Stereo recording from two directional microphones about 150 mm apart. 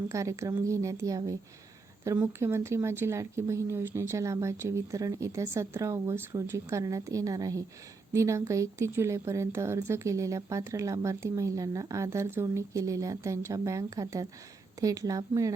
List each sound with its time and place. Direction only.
0.1 s a woman's voice: 20° right (ahead or behind)